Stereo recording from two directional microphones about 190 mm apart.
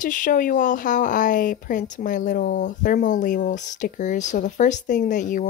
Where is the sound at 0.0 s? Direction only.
45° left (ahead or behind).